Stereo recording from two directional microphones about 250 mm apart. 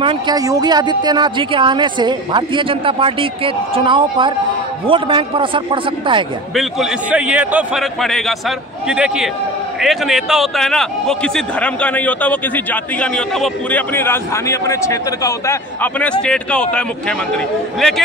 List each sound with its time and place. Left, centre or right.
0.0 s speech: centre
6.5 s a man's voice: centre